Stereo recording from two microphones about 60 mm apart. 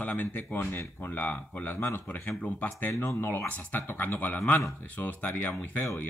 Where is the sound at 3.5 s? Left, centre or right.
Left.